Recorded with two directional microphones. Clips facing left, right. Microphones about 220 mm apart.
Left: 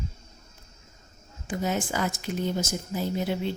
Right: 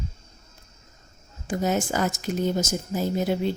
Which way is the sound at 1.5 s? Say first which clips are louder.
Right 4 dB; 45° right (ahead or behind).